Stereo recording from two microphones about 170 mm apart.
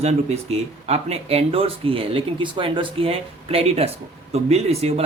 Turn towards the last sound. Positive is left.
turn(degrees=-35)  # may be behind; listen again after turning